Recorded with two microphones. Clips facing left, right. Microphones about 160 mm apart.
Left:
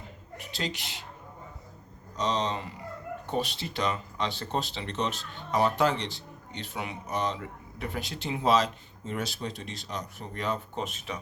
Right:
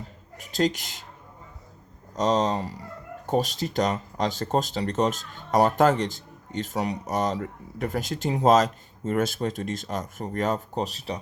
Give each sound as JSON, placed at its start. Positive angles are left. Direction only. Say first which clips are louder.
{"t": 0.3, "sound": "a woman's voice", "louder": "right 10 dB", "side_deg": -45}
{"t": 2.1, "sound": "speech", "louder": "right 6 dB", "side_deg": -45}